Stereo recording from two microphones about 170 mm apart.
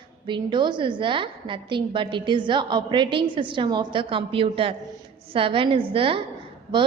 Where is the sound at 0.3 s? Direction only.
25° right (ahead or behind).